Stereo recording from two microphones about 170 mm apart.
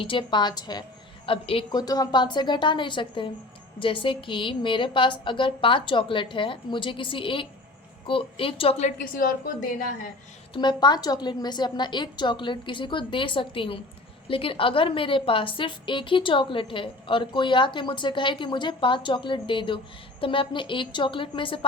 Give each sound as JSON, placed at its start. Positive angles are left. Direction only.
{"t": 0.0, "sound": "a woman's voice", "side_deg": 30}
{"t": 9.0, "sound": "a woman's voice", "side_deg": 55}
{"t": 10.5, "sound": "a woman's voice", "side_deg": 25}